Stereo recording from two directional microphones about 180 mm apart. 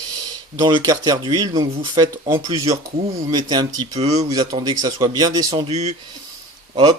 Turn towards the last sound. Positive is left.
turn(degrees=-25)  # may be behind; listen again after turning